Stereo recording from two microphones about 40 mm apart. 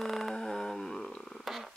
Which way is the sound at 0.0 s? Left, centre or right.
Centre.